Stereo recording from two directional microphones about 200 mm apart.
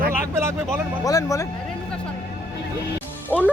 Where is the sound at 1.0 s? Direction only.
15° left (ahead or behind).